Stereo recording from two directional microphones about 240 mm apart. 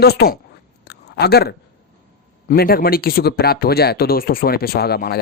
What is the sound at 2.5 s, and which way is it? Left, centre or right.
Speech, left.